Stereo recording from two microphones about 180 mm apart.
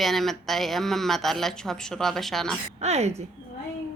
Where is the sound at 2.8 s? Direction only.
35° right (ahead or behind).